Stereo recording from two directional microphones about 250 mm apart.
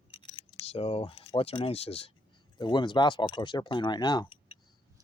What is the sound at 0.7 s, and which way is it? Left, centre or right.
Speech, left.